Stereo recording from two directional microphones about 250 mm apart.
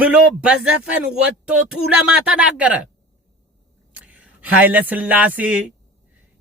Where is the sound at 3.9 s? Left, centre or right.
Centre.